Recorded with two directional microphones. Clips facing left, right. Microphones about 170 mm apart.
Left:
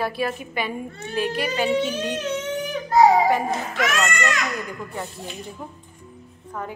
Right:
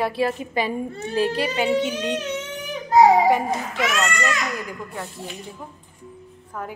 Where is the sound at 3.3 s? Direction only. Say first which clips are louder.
Right 1 dB; 10° right (ahead or behind).